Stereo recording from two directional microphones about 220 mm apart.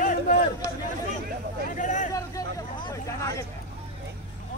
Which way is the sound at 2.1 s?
15° left (ahead or behind).